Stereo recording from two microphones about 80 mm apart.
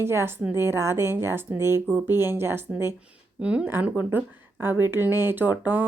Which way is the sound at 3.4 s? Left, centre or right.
Centre.